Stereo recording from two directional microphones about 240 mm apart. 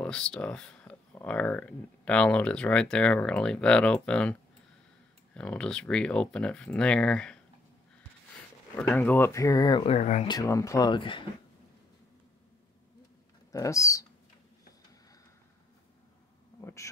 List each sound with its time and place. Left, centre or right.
0.0 s speech: centre
8.7 s speech: centre; by 10.3 s left
10.3 s speech: centre
13.5 s speech: centre
16.6 s insect: centre